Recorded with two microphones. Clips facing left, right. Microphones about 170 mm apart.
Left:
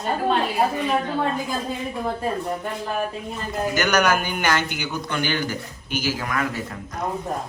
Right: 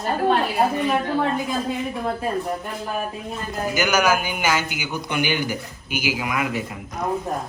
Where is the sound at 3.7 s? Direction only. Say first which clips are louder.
Right 1 dB; 5° right (ahead or behind).